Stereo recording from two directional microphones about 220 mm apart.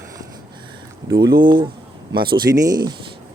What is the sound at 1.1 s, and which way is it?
Speech, 20° right (ahead or behind).